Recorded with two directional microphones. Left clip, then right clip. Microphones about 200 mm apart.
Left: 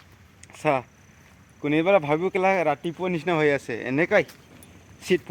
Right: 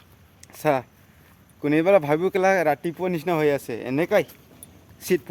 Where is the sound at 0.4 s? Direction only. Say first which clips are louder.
Right 1 dB; 25° right (ahead or behind).